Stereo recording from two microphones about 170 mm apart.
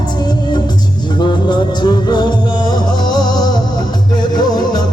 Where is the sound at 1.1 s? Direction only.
25° left (ahead or behind).